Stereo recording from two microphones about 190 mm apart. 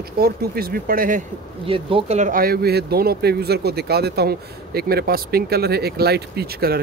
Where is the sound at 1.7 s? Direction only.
30° right (ahead or behind).